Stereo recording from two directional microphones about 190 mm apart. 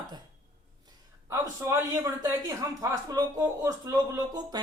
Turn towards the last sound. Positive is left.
turn(degrees=-20)  # may be behind; listen again after turning